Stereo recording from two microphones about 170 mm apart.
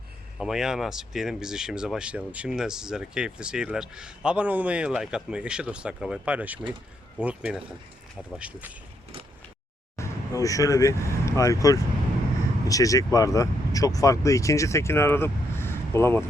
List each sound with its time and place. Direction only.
0.3 s speech: 5° right (ahead or behind)
10.0 s speech: 20° left (ahead or behind)